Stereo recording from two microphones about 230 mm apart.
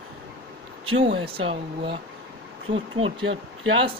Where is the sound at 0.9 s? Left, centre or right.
Right.